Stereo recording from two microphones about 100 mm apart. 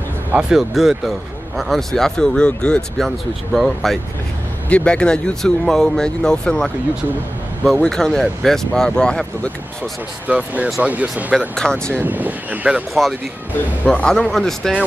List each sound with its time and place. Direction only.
0.4 s speech: 5° right (ahead or behind)
7.8 s speech: 5° left (ahead or behind)
10.2 s speech: 15° right (ahead or behind)
11.3 s speech: 5° left (ahead or behind)
12.0 s speech: 15° right (ahead or behind)
13.8 s speech: 5° left (ahead or behind)